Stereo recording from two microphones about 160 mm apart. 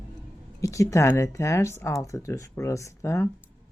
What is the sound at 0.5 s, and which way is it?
Speech, 20° left (ahead or behind).